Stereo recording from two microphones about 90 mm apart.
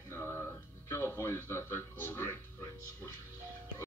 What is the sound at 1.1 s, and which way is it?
Music, 30° left (ahead or behind).